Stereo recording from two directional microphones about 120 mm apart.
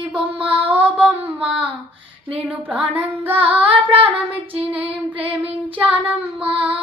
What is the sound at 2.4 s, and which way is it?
Child singing, 10° right (ahead or behind).